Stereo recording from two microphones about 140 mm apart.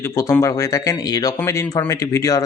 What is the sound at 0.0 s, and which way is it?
A man's voice, 20° left (ahead or behind).